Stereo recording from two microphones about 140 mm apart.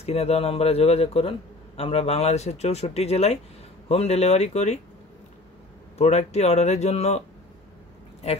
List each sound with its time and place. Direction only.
0.0 s speech: 45° left (ahead or behind)
5.9 s speech: 55° left (ahead or behind)